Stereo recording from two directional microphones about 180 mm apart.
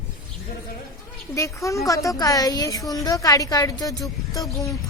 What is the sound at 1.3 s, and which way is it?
A child's voice, 15° left (ahead or behind).